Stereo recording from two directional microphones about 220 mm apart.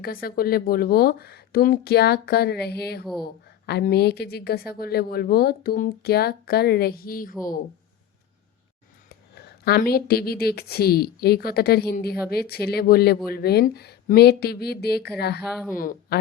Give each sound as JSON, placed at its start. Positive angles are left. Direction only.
{"t": 0.0, "sound": "a woman's voice", "side_deg": 40}
{"t": 9.3, "sound": "a woman's voice", "side_deg": 45}